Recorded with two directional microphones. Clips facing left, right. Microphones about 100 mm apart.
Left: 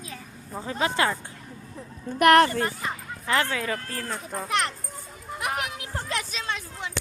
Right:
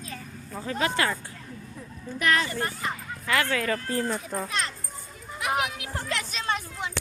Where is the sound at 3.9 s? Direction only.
15° right (ahead or behind).